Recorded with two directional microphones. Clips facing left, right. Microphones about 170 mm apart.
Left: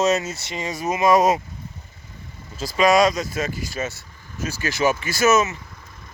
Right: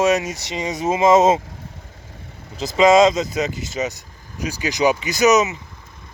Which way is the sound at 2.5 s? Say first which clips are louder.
Right 4 dB; 20° right (ahead or behind).